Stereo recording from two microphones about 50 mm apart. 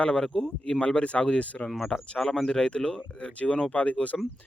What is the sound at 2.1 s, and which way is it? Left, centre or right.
Speech, centre.